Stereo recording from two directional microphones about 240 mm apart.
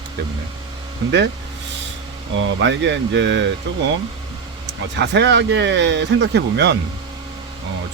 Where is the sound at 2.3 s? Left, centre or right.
Right.